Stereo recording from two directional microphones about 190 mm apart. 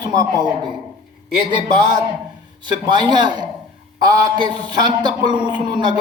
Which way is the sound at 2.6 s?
25° right (ahead or behind).